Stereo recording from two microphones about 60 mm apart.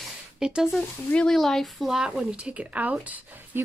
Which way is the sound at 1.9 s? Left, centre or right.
Centre.